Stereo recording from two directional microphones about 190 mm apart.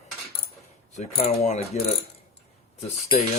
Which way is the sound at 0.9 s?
35° left (ahead or behind).